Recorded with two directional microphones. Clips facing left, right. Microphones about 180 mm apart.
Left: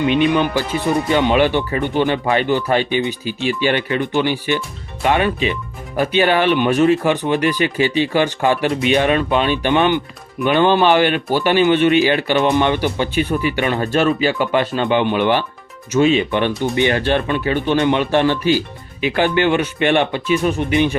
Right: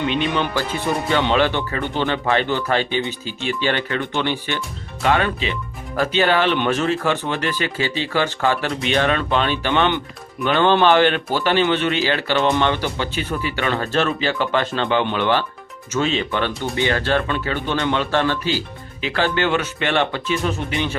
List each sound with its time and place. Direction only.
0.1 s speech: 15° left (ahead or behind)